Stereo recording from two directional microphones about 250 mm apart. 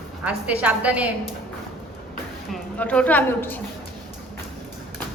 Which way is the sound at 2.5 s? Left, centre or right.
Centre.